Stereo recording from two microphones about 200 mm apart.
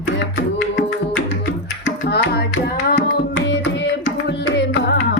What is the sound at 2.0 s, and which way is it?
Music, 55° left (ahead or behind).